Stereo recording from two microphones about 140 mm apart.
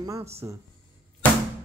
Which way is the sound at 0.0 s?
25° right (ahead or behind).